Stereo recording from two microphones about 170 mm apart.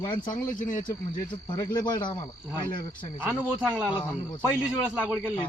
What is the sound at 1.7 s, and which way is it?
Speech, 25° left (ahead or behind).